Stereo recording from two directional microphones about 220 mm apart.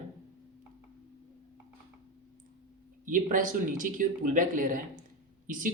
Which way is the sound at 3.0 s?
35° right (ahead or behind).